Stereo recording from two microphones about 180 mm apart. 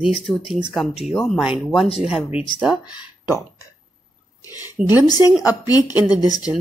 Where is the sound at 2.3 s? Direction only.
30° left (ahead or behind).